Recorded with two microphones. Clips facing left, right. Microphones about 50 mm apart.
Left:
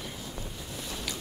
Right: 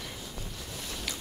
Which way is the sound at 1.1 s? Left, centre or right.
Right.